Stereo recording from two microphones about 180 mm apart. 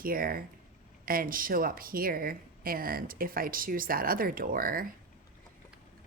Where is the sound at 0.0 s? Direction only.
55° right (ahead or behind).